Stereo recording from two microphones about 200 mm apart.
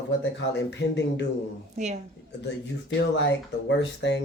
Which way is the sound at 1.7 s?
35° right (ahead or behind).